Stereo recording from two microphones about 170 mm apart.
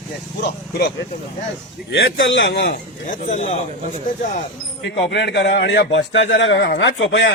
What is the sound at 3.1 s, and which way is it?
Speech, 45° left (ahead or behind).